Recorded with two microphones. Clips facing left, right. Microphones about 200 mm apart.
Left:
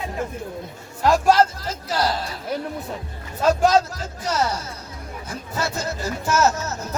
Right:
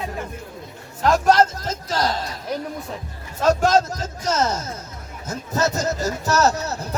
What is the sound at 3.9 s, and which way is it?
Speech, 45° right (ahead or behind).